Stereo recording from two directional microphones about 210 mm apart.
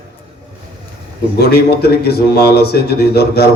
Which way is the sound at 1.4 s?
50° left (ahead or behind).